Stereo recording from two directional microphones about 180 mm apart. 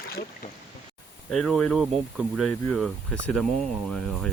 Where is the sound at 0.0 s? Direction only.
55° left (ahead or behind).